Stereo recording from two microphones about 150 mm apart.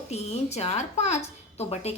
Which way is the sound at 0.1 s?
45° left (ahead or behind).